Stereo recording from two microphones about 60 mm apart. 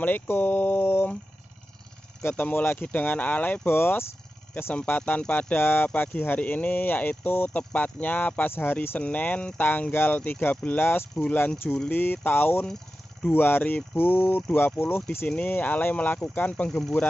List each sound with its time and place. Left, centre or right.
0.0 s speech: left
2.2 s speech: left
3.7 s speech: left
4.7 s speech: left
5.6 s speech: left
10.8 s speech: left
11.1 s speech: left
12.6 s vehicle: centre
13.3 s speech: left
15.2 s speech: left